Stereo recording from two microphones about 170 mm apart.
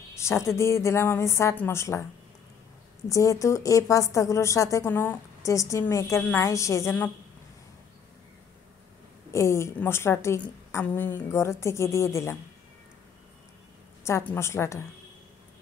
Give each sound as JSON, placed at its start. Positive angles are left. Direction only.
{"t": 0.1, "sound": "a woman's voice", "side_deg": 15}
{"t": 3.1, "sound": "a woman's voice", "side_deg": 20}
{"t": 9.3, "sound": "a woman's voice", "side_deg": 15}
{"t": 14.0, "sound": "a woman's voice", "side_deg": 15}